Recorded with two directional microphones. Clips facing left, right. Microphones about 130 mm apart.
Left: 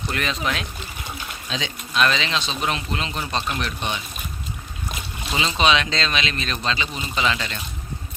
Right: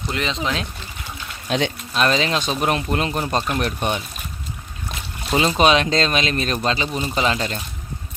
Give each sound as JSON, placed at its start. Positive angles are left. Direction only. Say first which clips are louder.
{"t": 0.1, "sound": "speech", "louder": "right 2 dB", "side_deg": -20}
{"t": 1.5, "sound": "speech", "louder": "right 9 dB", "side_deg": -60}
{"t": 1.9, "sound": "speech", "louder": "right 1 dB", "side_deg": -40}
{"t": 5.3, "sound": "speech", "louder": "right 4 dB", "side_deg": -45}